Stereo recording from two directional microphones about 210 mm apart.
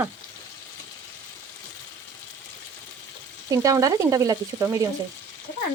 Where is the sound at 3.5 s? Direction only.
15° right (ahead or behind).